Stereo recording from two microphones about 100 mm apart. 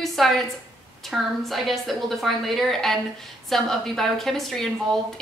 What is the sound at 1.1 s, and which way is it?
A woman's voice, centre (ahead or behind).